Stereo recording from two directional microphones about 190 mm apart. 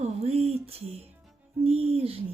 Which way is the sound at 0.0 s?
35° right (ahead or behind).